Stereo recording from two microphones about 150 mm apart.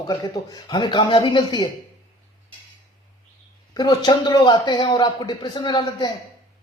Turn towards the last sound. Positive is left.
turn(degrees=30)  # may be behind; listen again after turning